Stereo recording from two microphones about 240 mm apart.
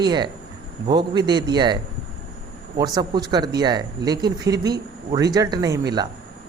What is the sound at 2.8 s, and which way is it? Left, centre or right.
Speech, centre.